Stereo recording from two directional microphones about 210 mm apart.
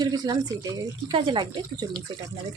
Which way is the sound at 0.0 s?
15° right (ahead or behind).